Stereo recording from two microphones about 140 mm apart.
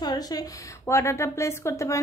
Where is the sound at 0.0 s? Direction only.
25° left (ahead or behind).